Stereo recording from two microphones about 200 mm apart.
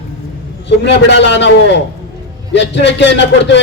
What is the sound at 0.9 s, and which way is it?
A man's voice, 60° left (ahead or behind).